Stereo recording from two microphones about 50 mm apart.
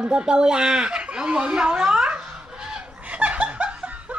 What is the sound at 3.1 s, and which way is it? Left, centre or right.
Snicker, right.